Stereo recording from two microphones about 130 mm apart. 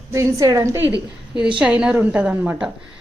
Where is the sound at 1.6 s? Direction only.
10° right (ahead or behind).